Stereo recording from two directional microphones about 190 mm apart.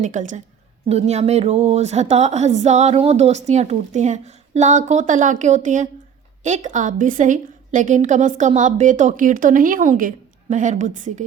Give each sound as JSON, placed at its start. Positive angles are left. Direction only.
{"t": 0.0, "sound": "a woman's voice", "side_deg": -40}